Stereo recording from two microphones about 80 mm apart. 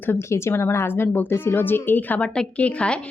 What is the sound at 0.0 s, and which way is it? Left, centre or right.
A woman's voice, left.